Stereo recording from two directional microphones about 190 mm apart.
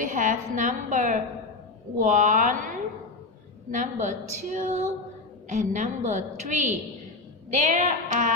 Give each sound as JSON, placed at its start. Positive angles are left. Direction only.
{"t": 0.0, "sound": "a woman's voice", "side_deg": -45}
{"t": 3.7, "sound": "a woman's voice", "side_deg": -40}